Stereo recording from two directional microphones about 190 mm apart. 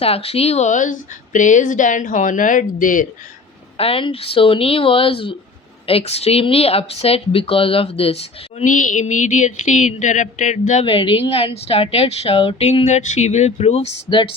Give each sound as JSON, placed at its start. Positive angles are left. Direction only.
{"t": 0.0, "sound": "speech", "side_deg": 30}
{"t": 3.8, "sound": "speech", "side_deg": 30}